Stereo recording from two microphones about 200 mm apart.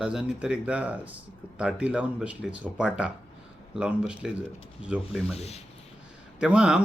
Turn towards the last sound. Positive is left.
turn(degrees=-5)  # may be behind; listen again after turning